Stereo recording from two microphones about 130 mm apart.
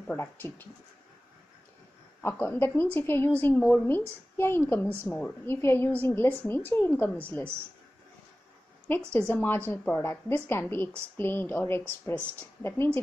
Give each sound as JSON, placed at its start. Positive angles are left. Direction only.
{"t": 0.1, "sound": "a woman's voice", "side_deg": 15}
{"t": 2.2, "sound": "a woman's voice", "side_deg": 15}
{"t": 8.8, "sound": "a woman's voice", "side_deg": 15}